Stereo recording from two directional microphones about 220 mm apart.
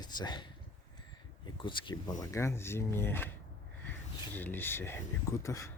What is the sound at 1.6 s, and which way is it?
Speech, 20° left (ahead or behind).